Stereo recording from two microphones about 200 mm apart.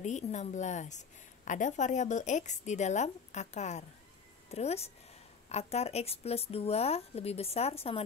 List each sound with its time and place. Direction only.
0.0 s a woman's voice: 35° left (ahead or behind)